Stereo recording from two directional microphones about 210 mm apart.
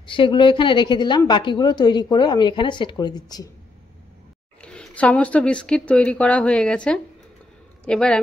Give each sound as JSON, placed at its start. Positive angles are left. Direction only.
{"t": 0.0, "sound": "a woman's voice", "side_deg": 25}
{"t": 4.6, "sound": "a man's voice", "side_deg": 5}